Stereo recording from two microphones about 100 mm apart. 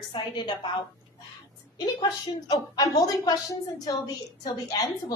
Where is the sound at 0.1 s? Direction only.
55° left (ahead or behind).